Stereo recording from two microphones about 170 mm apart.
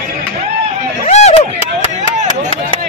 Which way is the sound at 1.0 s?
40° left (ahead or behind).